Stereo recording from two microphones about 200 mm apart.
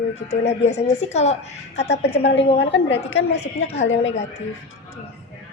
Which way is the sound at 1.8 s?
55° left (ahead or behind).